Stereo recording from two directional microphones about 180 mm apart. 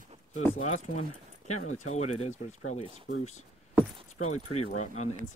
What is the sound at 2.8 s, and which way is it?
Speech, 30° right (ahead or behind).